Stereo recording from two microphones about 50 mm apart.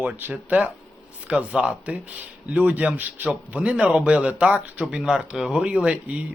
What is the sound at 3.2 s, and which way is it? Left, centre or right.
Speech, right.